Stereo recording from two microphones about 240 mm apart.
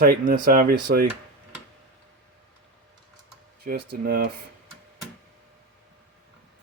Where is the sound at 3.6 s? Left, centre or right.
Right.